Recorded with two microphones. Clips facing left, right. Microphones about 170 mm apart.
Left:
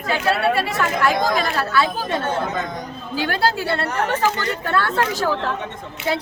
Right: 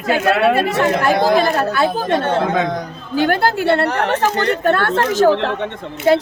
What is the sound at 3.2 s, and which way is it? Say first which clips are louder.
Speech: right 6 dB; 50° right (ahead or behind).